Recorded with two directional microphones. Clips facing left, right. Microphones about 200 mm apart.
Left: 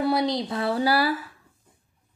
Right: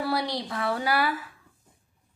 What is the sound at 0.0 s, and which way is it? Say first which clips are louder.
Speech: left 5 dB; 20° left (ahead or behind).